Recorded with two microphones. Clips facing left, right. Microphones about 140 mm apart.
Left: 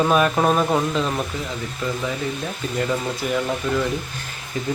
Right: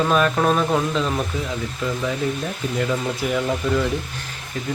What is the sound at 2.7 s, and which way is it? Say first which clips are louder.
Speech: even; centre (ahead or behind).